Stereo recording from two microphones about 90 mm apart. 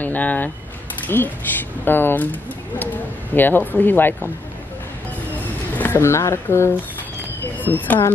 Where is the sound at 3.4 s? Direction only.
20° left (ahead or behind).